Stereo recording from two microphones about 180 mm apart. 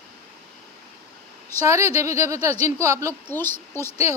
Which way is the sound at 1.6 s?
15° right (ahead or behind).